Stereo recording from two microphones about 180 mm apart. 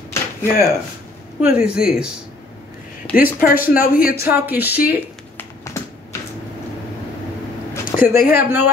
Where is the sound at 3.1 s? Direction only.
50° left (ahead or behind).